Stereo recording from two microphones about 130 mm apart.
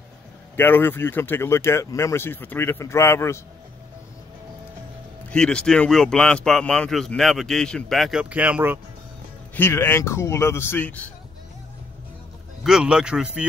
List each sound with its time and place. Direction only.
0.6 s speech: 15° left (ahead or behind)
5.3 s a man's voice: 5° left (ahead or behind); by 8.7 s 10° right (ahead or behind)
9.6 s speech: 20° left (ahead or behind)
12.6 s speech: 5° right (ahead or behind)